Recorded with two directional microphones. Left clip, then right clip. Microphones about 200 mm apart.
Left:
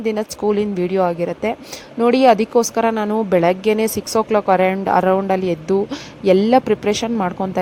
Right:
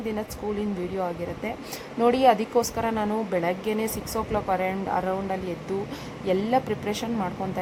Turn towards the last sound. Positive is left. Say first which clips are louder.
# left 10 dB
turn(degrees=35)  # may be behind; listen again after turning